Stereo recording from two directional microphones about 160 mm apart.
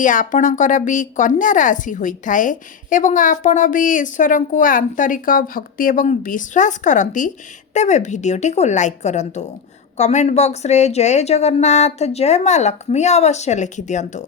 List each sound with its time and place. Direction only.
0.0 s a woman's voice: 55° left (ahead or behind)